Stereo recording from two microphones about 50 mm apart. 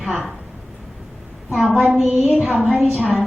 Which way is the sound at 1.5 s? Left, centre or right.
Centre.